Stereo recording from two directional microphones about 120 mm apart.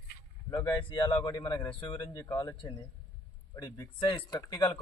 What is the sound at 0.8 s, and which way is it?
Speech, 45° left (ahead or behind).